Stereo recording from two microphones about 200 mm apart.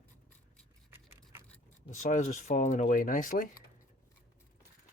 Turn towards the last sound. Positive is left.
turn(degrees=40)  # may be behind; listen again after turning